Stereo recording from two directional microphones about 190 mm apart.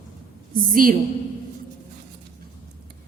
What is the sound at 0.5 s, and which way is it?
Speech, 45° right (ahead or behind).